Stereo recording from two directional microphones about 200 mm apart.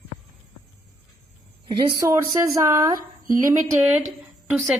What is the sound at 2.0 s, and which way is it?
Speech, 15° right (ahead or behind).